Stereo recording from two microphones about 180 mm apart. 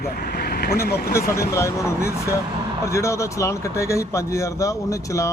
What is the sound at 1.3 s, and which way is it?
Speech, 15° left (ahead or behind).